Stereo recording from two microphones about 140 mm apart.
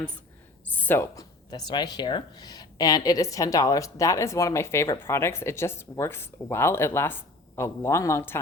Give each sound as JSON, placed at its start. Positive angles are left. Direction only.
{"t": 0.7, "sound": "speech", "side_deg": 15}